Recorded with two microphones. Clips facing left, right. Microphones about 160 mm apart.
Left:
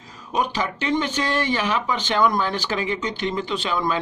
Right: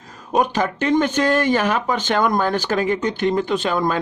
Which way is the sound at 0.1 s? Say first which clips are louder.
Right 5 dB; 50° right (ahead or behind).